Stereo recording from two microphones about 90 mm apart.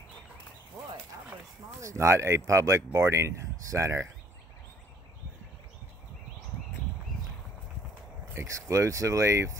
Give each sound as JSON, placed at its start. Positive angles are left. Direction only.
{"t": 1.8, "sound": "speech", "side_deg": -35}
{"t": 8.3, "sound": "speech", "side_deg": -35}